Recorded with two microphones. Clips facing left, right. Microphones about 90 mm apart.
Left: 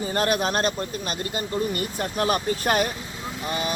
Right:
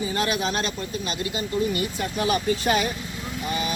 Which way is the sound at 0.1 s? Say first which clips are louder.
Left 6 dB; 50° left (ahead or behind).